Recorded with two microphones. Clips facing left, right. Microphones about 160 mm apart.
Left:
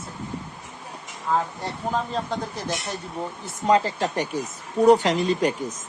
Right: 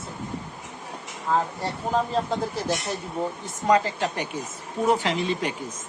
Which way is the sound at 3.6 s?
30° left (ahead or behind).